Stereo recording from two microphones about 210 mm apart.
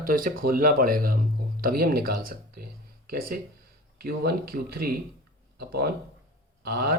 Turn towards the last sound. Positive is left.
turn(degrees=-45)  # may be behind; listen again after turning